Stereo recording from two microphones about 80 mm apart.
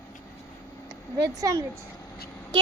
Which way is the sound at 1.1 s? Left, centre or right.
Right.